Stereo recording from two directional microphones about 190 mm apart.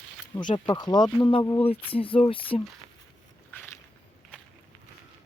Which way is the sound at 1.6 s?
30° left (ahead or behind).